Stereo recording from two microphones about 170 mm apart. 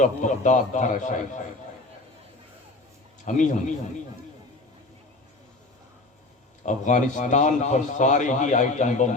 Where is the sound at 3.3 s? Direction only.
45° left (ahead or behind).